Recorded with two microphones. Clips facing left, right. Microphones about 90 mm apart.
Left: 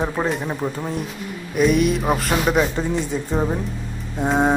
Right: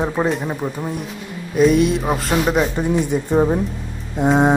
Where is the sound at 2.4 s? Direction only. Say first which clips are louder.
Even; 15° right (ahead or behind).